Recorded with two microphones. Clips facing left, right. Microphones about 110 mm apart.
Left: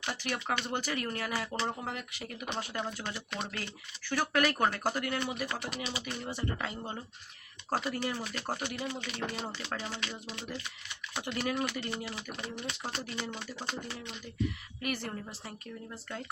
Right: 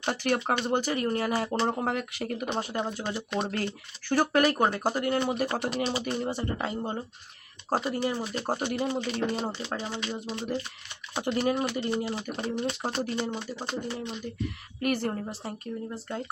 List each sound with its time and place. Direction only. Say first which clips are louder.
0.1 s a woman's voice: right 9 dB; 50° right (ahead or behind)
0.5 s speech: right 7 dB; 30° right (ahead or behind)
1.7 s speech: right 9 dB; 60° right (ahead or behind)
2.8 s speech: right 6 dB; 25° right (ahead or behind)
3.4 s a woman's voice: right 8 dB; 50° right (ahead or behind)
4.1 s speech: right 6 dB; 35° right (ahead or behind)
9.5 s speech: right 5 dB; 20° right (ahead or behind)
10.2 s speech: right 9 dB; 30° right (ahead or behind)
14.8 s a woman's voice: right 9 dB; 45° right (ahead or behind)